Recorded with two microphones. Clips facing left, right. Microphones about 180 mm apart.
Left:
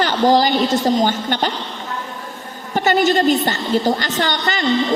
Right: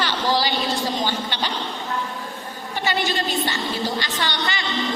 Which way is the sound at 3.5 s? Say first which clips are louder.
Left 8 dB; 45° left (ahead or behind).